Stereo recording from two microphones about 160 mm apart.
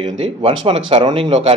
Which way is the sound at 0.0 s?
35° right (ahead or behind).